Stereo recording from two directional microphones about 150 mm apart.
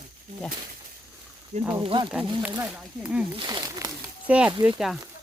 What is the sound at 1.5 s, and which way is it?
Speech, 40° right (ahead or behind).